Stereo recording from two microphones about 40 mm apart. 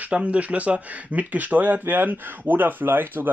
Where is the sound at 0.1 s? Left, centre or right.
Right.